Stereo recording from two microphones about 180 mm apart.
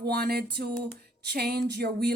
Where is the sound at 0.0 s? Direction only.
60° right (ahead or behind).